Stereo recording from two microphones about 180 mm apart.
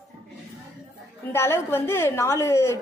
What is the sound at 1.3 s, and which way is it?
A woman's voice, 15° left (ahead or behind).